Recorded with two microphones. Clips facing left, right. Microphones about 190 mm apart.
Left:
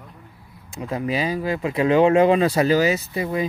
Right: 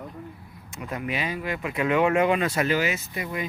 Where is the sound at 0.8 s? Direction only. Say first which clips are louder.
Left 6 dB; 30° left (ahead or behind).